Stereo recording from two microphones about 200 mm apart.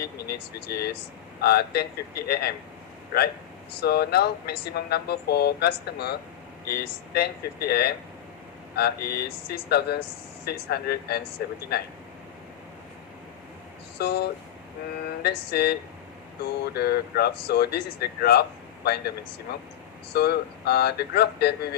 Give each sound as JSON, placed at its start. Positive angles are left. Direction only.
{"t": 0.0, "sound": "speech", "side_deg": 50}
{"t": 3.8, "sound": "speech", "side_deg": 55}
{"t": 14.0, "sound": "speech", "side_deg": 55}